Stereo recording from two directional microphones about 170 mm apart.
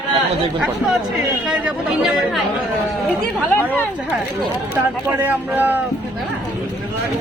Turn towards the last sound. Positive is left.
turn(degrees=-10)  # may be behind; listen again after turning